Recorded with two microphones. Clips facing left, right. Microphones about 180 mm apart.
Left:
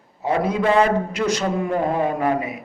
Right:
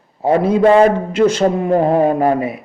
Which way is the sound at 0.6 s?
45° right (ahead or behind).